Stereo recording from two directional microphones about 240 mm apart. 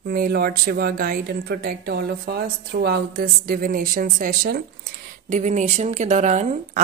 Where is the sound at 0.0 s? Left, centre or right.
Right.